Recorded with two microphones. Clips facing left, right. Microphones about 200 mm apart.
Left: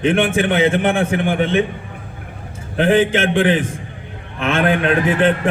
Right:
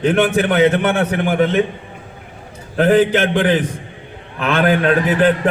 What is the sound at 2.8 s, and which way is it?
A man's voice, 40° right (ahead or behind).